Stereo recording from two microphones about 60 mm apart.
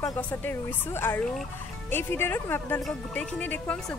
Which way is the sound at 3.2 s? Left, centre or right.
Left.